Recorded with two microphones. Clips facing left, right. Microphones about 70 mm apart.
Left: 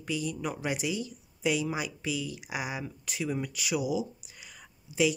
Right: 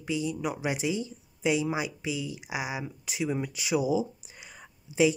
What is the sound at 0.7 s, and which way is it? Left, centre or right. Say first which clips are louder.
Speech: right 3 dB; right.